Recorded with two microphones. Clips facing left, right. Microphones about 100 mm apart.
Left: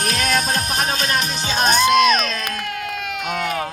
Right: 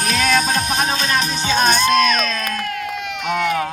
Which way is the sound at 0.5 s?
25° right (ahead or behind).